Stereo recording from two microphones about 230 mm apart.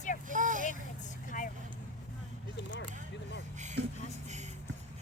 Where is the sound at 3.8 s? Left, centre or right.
Right.